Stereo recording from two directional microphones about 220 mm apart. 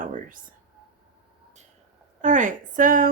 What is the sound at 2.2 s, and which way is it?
Speech, 35° right (ahead or behind).